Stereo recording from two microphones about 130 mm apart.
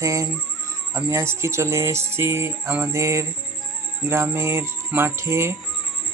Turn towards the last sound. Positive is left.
turn(degrees=-20)  # may be behind; listen again after turning